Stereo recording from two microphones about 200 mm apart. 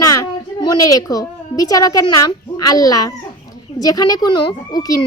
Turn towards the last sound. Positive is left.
turn(degrees=20)  # may be behind; listen again after turning